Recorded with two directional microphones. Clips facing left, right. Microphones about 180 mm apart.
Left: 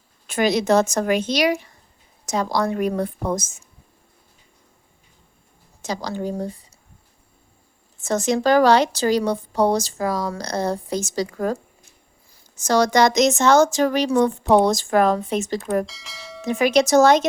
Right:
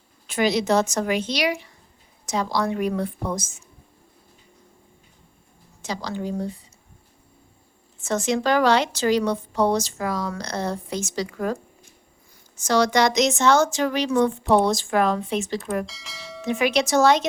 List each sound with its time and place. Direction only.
0.3 s a woman's voice: 50° left (ahead or behind)
5.8 s a woman's voice: 45° left (ahead or behind)
8.0 s speech: 40° left (ahead or behind)
12.6 s a woman's voice: 40° left (ahead or behind)
15.9 s speech: centre (ahead or behind)
16.5 s speech: 40° left (ahead or behind)